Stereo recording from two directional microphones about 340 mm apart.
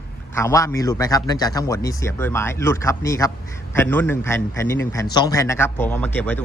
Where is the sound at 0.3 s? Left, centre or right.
Centre.